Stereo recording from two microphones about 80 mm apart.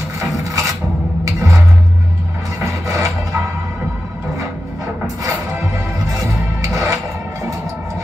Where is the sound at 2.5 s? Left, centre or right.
Right.